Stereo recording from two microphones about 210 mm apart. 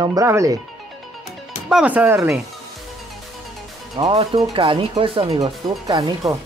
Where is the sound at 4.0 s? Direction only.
25° right (ahead or behind).